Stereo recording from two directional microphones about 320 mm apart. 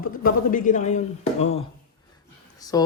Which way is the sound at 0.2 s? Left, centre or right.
Left.